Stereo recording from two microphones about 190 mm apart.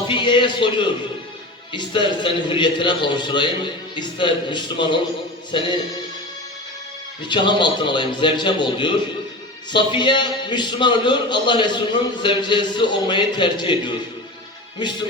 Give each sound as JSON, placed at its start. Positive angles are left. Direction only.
{"t": 0.1, "sound": "a man's voice", "side_deg": 25}
{"t": 7.2, "sound": "a man's voice", "side_deg": 25}